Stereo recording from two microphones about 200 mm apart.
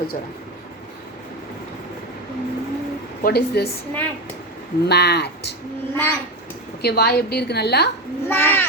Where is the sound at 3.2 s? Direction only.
50° left (ahead or behind).